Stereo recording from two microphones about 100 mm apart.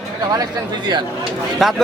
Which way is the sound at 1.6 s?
Centre (ahead or behind).